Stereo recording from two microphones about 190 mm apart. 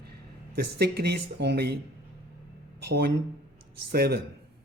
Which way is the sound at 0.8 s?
55° right (ahead or behind).